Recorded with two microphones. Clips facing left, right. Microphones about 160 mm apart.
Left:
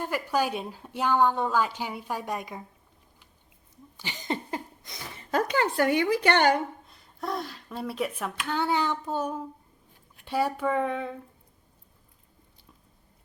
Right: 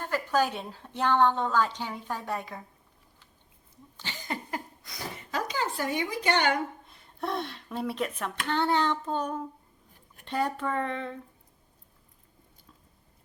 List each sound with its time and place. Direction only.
0.0 s a woman's voice: 10° left (ahead or behind)
3.9 s cough: 15° left (ahead or behind)
5.3 s a woman's voice: 55° left (ahead or behind)
6.8 s a woman's voice: centre (ahead or behind)